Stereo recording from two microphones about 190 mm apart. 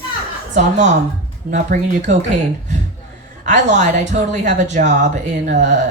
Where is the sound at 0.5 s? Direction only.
40° right (ahead or behind).